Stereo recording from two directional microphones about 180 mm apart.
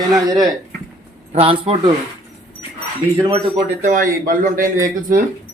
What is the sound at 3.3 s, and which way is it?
Speech, 40° right (ahead or behind).